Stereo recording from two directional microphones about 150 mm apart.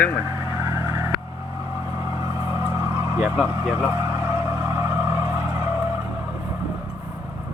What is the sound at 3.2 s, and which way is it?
Speech, 5° right (ahead or behind).